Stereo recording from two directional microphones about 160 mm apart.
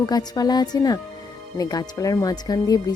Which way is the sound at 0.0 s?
25° left (ahead or behind).